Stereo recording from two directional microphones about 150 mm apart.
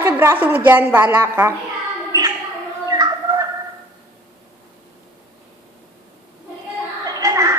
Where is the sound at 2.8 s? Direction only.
25° right (ahead or behind).